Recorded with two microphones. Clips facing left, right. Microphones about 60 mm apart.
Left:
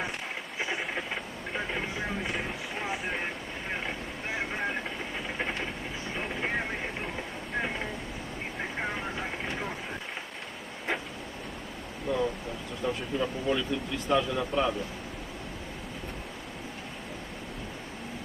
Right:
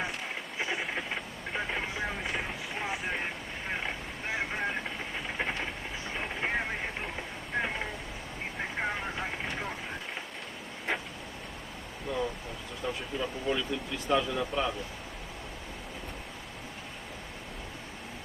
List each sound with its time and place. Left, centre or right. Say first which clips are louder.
0.6 s vehicle: left 1 dB; centre
12.0 s a sound: left 4 dB; centre
12.8 s speech: left 4 dB; centre